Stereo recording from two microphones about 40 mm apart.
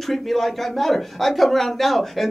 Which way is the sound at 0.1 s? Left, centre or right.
Centre.